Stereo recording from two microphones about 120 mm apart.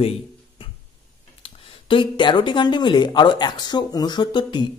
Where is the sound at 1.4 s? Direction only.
45° left (ahead or behind).